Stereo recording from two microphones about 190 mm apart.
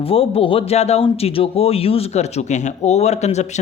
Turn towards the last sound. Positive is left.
turn(degrees=35)  # may be behind; listen again after turning